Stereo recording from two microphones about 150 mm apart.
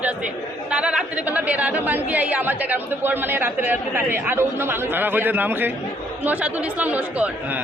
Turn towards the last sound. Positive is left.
turn(degrees=-10)  # may be behind; listen again after turning